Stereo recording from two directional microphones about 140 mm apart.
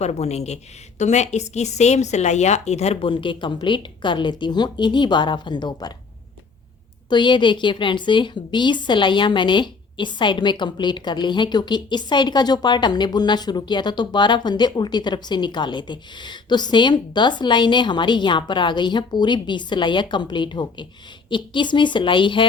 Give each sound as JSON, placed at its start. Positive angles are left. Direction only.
{"t": 0.0, "sound": "a woman's voice", "side_deg": 50}
{"t": 7.1, "sound": "a woman's voice", "side_deg": 35}